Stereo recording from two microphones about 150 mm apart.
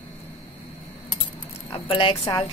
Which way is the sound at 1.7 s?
35° left (ahead or behind).